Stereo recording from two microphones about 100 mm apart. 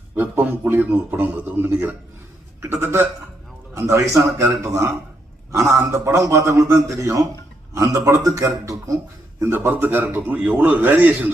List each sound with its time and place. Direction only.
0.2 s a man's voice: 15° right (ahead or behind); by 9.0 s 35° right (ahead or behind)
9.4 s a man's voice: 20° right (ahead or behind)